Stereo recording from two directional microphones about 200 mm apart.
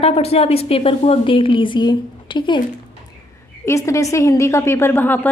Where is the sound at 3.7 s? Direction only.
15° left (ahead or behind).